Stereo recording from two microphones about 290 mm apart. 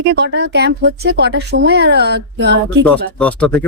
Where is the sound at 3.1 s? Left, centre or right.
Centre.